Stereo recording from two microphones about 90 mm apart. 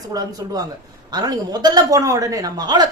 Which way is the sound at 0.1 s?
45° right (ahead or behind).